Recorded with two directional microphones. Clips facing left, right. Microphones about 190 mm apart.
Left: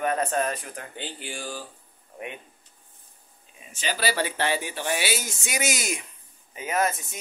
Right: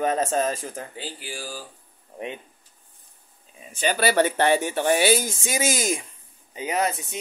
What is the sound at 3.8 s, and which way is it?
Speech, 55° right (ahead or behind).